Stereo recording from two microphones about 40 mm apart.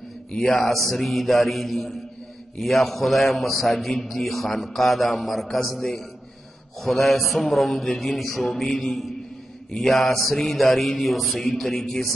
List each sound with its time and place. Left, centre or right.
0.4 s a man's voice: centre